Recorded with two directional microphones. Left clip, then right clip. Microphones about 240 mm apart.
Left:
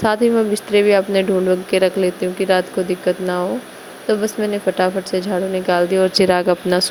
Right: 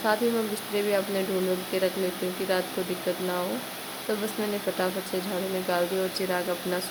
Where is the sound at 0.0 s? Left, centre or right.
Left.